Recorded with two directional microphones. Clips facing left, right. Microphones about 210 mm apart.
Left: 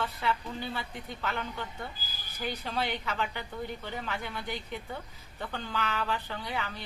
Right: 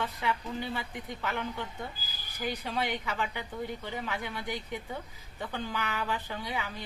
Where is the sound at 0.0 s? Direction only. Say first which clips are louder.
Left 1 dB; 10° right (ahead or behind).